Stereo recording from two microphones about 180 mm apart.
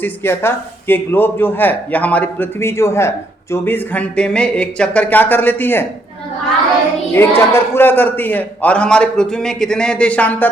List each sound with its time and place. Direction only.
0.0 s a man's voice: 10° left (ahead or behind)
7.1 s a man's voice: 15° left (ahead or behind)